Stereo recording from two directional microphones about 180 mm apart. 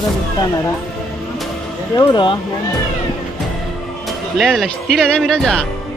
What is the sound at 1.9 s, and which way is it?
Speech, 25° left (ahead or behind).